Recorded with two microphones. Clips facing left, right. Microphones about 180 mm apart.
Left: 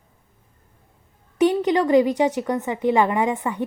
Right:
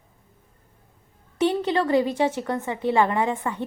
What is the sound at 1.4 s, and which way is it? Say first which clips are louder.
A woman's voice: left 4 dB; 15° left (ahead or behind).